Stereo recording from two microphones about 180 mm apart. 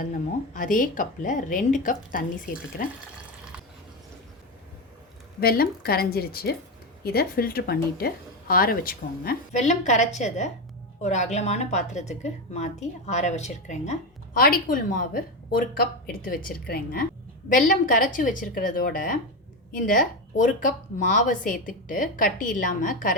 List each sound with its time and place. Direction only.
0.0 s speech: 50° left (ahead or behind)
5.4 s a woman's voice: 55° left (ahead or behind)
9.5 s a woman's voice: 40° left (ahead or behind)
14.3 s speech: 55° left (ahead or behind)